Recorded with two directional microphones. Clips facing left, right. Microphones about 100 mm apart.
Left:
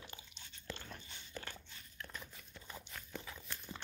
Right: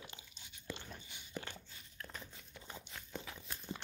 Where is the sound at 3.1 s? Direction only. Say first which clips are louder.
Right 1 dB; 20° right (ahead or behind).